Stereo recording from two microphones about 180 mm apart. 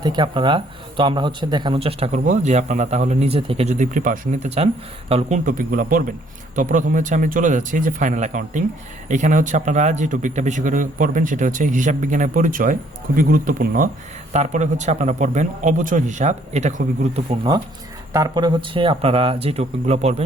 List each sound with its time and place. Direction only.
0.0 s a man's voice: 25° right (ahead or behind)
18.1 s a man's voice: 20° right (ahead or behind); by 20.2 s 35° right (ahead or behind)